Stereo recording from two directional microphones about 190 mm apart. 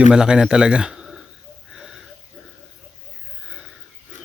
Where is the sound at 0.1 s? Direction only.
5° right (ahead or behind).